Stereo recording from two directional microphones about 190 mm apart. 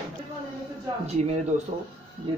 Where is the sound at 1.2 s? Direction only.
35° right (ahead or behind).